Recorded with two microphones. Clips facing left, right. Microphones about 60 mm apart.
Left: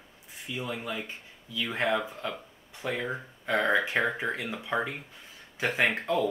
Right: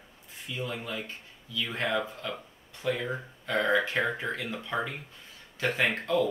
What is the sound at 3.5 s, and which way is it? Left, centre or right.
Speech, centre.